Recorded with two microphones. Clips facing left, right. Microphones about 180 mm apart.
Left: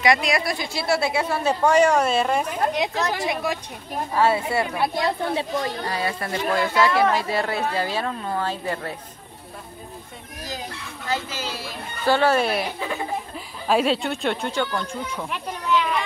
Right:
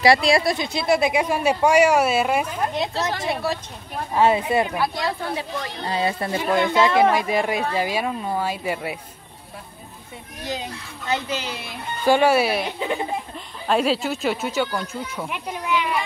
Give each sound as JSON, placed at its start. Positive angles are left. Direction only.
{"t": 0.0, "sound": "speech", "side_deg": -30}
{"t": 2.7, "sound": "speech", "side_deg": 15}
{"t": 4.1, "sound": "speech", "side_deg": -20}
{"t": 4.7, "sound": "speech", "side_deg": 25}
{"t": 5.9, "sound": "speech", "side_deg": -25}
{"t": 11.1, "sound": "speech", "side_deg": -20}
{"t": 13.7, "sound": "speech", "side_deg": 0}